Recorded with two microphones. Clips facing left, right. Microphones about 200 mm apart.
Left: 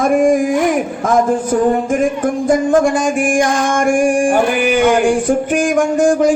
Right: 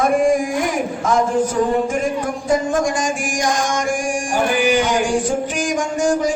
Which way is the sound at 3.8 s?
55° left (ahead or behind).